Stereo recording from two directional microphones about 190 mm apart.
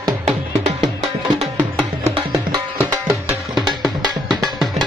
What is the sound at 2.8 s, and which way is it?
Music, 5° right (ahead or behind).